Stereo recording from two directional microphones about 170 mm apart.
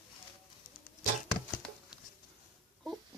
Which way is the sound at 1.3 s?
Centre (ahead or behind).